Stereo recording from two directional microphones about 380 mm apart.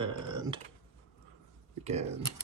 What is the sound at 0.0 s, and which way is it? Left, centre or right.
Typing, centre.